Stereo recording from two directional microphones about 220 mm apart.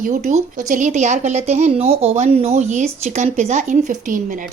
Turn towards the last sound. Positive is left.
turn(degrees=-35)  # may be behind; listen again after turning